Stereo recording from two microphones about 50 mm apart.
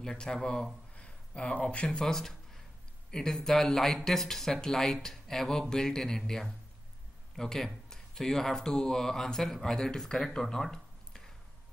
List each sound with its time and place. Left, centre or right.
0.0 s speech: centre
0.9 s a sound: left
1.9 s speech: centre